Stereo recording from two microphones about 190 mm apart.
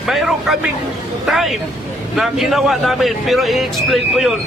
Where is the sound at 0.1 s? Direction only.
Centre (ahead or behind).